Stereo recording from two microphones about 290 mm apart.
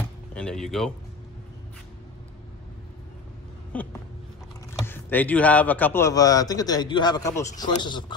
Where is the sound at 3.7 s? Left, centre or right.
Centre.